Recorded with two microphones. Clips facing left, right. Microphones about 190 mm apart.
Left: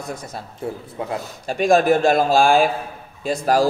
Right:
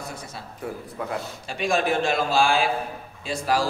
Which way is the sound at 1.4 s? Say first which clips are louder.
Left 9 dB; 45° left (ahead or behind).